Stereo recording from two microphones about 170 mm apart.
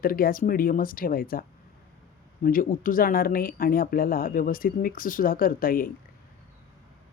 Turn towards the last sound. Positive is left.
turn(degrees=55)  # may be behind; listen again after turning